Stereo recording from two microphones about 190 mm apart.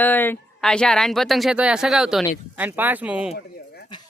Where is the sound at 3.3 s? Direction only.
55° left (ahead or behind).